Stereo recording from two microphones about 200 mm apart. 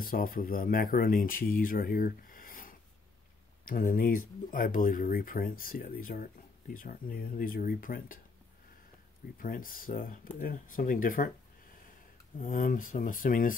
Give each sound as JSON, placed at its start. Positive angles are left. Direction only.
{"t": 0.0, "sound": "speech", "side_deg": 45}
{"t": 9.4, "sound": "speech", "side_deg": 45}
{"t": 12.4, "sound": "speech", "side_deg": 40}